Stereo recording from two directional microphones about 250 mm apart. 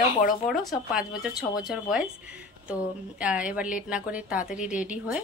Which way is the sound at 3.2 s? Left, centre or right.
Centre.